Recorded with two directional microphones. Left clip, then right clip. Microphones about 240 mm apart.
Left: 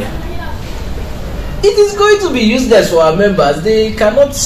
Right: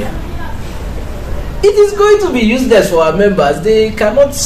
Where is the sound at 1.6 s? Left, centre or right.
Centre.